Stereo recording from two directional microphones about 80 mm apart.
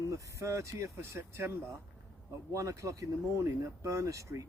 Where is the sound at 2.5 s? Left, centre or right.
Right.